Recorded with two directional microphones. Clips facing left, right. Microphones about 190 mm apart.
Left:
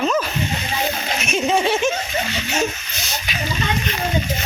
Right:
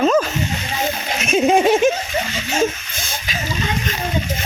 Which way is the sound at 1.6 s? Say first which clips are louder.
Right 5 dB; 50° right (ahead or behind).